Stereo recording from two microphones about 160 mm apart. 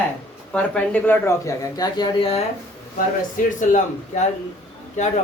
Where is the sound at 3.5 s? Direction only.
50° left (ahead or behind).